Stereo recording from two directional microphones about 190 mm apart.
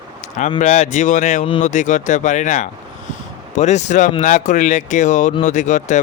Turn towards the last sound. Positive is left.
turn(degrees=40)  # may be behind; listen again after turning